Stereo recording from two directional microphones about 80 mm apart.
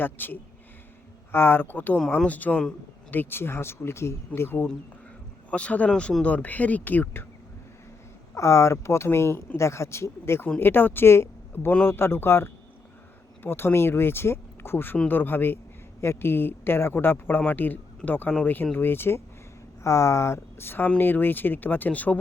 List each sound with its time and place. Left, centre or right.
0.0 s speech: left
2.0 s speech: centre
2.3 s speech: left
5.5 s speech: centre
8.4 s speech: left; by 22.2 s centre